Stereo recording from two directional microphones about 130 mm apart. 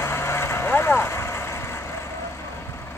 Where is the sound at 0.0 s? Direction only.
20° left (ahead or behind).